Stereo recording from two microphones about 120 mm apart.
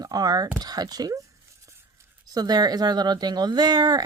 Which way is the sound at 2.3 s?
35° right (ahead or behind).